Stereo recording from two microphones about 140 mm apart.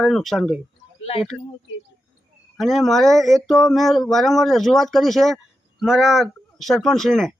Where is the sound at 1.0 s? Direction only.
45° left (ahead or behind).